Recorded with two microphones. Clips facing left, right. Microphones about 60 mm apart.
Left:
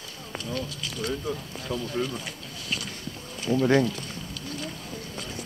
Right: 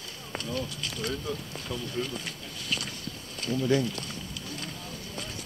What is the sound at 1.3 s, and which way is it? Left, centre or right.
Speech, left.